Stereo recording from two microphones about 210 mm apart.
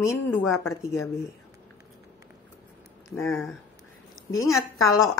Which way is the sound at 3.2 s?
Centre (ahead or behind).